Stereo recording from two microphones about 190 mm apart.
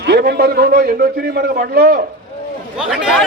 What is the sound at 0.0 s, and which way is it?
A man's voice, 55° right (ahead or behind).